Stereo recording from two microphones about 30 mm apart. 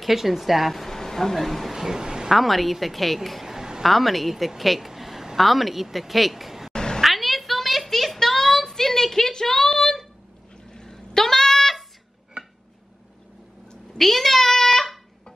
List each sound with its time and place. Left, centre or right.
0.0 s speech: centre
0.7 s speech: centre
1.7 s speech: centre
2.2 s speech: centre
3.4 s a sound: centre
3.8 s speech: centre
4.6 s a sound: centre
5.4 s speech: centre
6.7 s cat: left
7.0 s a sound: centre
11.1 s goat: centre
13.9 s a sound: centre